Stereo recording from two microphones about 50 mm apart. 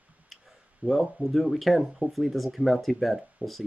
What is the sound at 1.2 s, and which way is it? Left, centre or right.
Speech, centre.